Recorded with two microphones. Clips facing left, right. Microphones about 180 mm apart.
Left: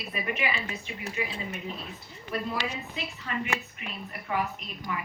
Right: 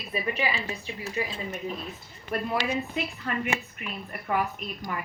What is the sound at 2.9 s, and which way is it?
A woman's voice, 50° right (ahead or behind).